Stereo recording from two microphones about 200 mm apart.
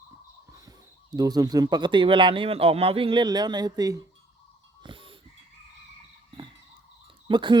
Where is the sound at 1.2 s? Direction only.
20° right (ahead or behind).